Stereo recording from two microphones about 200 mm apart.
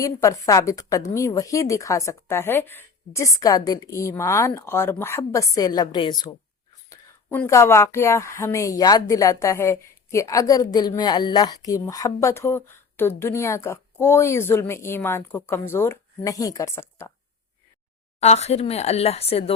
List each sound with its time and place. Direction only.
0.0 s a woman's voice: 15° left (ahead or behind)
6.9 s a woman's voice: 10° left (ahead or behind)
18.2 s speech: 35° left (ahead or behind)